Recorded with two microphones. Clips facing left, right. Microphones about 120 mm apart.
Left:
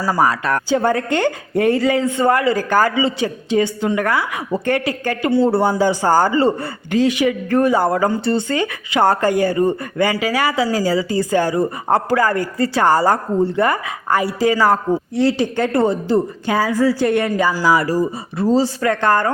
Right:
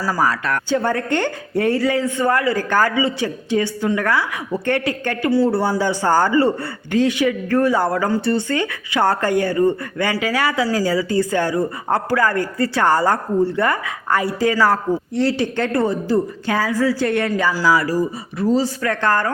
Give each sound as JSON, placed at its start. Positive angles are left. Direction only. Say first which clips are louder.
{"t": 0.0, "sound": "a woman's voice", "louder": "left 3 dB", "side_deg": 25}
{"t": 1.1, "sound": "a man's voice", "louder": "left 2 dB", "side_deg": 10}
{"t": 2.0, "sound": "a woman's voice", "louder": "left 2 dB", "side_deg": 25}
{"t": 2.6, "sound": "a man's voice", "louder": "left 2 dB", "side_deg": 10}
{"t": 2.9, "sound": "a woman's voice", "louder": "left 1 dB", "side_deg": 25}
{"t": 5.2, "sound": "a woman's voice", "louder": "left 2 dB", "side_deg": 25}
{"t": 6.3, "sound": "a woman's voice", "louder": "even", "side_deg": 25}
{"t": 6.9, "sound": "a man's voice", "louder": "left 1 dB", "side_deg": 10}
{"t": 11.5, "sound": "a woman's voice", "louder": "left 2 dB", "side_deg": 25}
{"t": 12.0, "sound": "a man's voice", "louder": "left 1 dB", "side_deg": 10}
{"t": 18.9, "sound": "a woman's voice", "louder": "left 3 dB", "side_deg": 20}